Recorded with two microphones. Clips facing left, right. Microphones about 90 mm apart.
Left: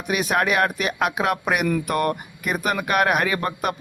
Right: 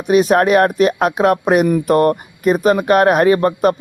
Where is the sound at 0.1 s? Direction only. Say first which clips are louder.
Right 10 dB; 35° right (ahead or behind).